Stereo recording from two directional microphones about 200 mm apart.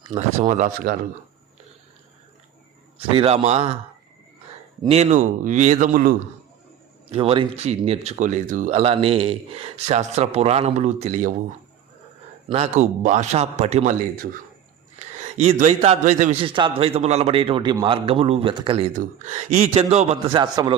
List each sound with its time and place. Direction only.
0.1 s speech: 35° right (ahead or behind)
3.1 s a man's voice: 30° right (ahead or behind)
4.8 s speech: 30° right (ahead or behind)
7.1 s speech: 25° right (ahead or behind)
12.5 s speech: 30° right (ahead or behind)
14.9 s a man's voice: 30° right (ahead or behind)
18.9 s speech: 35° right (ahead or behind)